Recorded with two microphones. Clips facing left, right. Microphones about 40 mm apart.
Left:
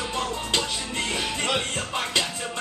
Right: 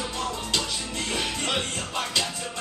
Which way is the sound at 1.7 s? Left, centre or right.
Left.